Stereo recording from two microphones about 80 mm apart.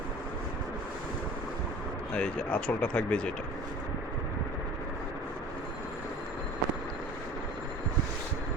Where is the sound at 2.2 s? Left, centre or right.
Centre.